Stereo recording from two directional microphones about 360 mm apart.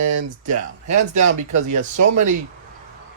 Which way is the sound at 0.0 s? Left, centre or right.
Right.